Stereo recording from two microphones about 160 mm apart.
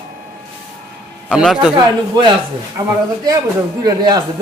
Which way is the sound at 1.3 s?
5° right (ahead or behind).